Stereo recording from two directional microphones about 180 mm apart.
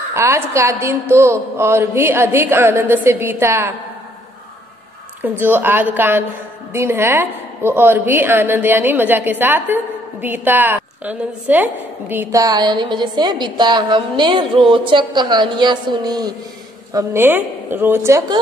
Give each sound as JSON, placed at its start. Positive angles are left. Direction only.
{"t": 0.1, "sound": "a woman's voice", "side_deg": -15}
{"t": 5.4, "sound": "a woman's voice", "side_deg": -10}